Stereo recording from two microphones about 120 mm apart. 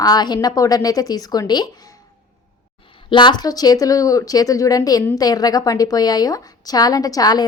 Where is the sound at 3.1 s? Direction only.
40° left (ahead or behind).